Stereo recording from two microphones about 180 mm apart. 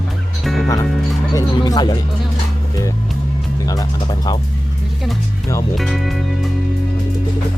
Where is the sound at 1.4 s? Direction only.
20° left (ahead or behind).